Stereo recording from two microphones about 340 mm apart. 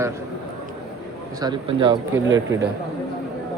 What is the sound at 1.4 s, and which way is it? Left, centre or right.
Speech, centre.